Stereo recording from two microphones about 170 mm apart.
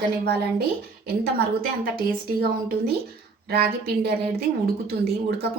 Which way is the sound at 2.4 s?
65° right (ahead or behind).